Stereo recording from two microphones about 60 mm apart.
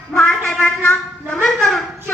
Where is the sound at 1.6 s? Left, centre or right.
Centre.